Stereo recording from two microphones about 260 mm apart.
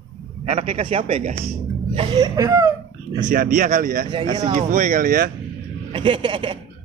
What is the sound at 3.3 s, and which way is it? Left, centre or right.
Speech, right.